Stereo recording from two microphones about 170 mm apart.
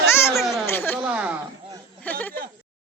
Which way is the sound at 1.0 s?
10° right (ahead or behind).